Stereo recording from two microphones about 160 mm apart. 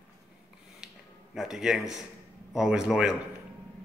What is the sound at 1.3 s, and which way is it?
A man's voice, centre (ahead or behind).